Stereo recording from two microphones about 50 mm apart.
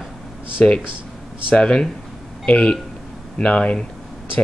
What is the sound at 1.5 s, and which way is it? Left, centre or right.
Speech, centre.